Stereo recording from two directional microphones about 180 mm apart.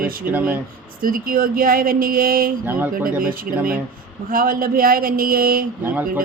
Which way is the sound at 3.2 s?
50° right (ahead or behind).